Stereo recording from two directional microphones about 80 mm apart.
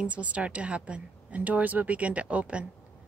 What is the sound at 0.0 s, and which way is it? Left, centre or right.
Speech, centre.